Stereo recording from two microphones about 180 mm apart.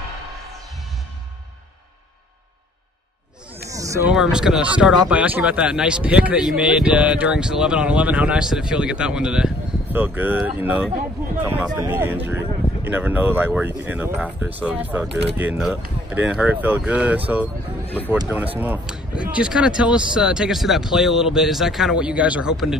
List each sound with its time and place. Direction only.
3.6 s a sound: 20° right (ahead or behind)
4.1 s speech: 5° right (ahead or behind)
18.3 s speech: 10° right (ahead or behind)